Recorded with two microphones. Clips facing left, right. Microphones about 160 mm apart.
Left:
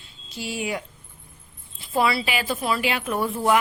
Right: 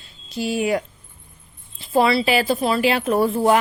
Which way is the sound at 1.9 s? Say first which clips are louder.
Right 6 dB; 30° right (ahead or behind).